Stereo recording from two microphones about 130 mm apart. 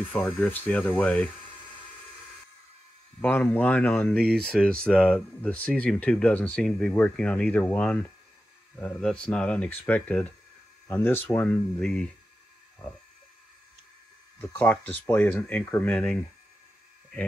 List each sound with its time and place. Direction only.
0.1 s speech: 10° left (ahead or behind)
3.2 s speech: 15° left (ahead or behind)
14.4 s speech: 10° left (ahead or behind)